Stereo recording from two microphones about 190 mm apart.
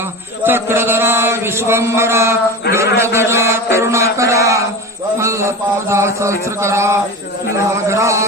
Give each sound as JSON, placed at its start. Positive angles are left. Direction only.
{"t": 0.4, "sound": "chant", "side_deg": -10}
{"t": 2.7, "sound": "a man's voice", "side_deg": -15}
{"t": 5.2, "sound": "chant", "side_deg": -15}